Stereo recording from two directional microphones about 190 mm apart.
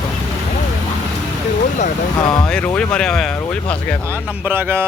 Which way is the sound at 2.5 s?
5° left (ahead or behind).